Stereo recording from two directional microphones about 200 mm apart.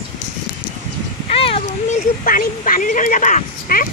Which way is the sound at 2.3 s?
45° left (ahead or behind).